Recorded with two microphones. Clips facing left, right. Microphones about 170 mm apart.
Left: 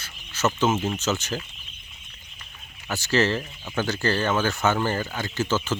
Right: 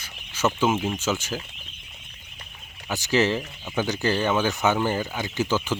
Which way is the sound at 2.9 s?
15° right (ahead or behind).